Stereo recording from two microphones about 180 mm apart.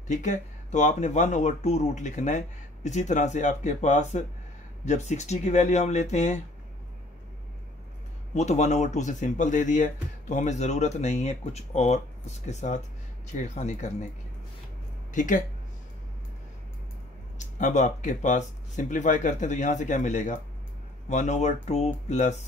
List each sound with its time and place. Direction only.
0.1 s speech: 45° left (ahead or behind)
8.4 s speech: 40° left (ahead or behind)
15.1 s speech: 45° left (ahead or behind)
17.6 s speech: 45° left (ahead or behind)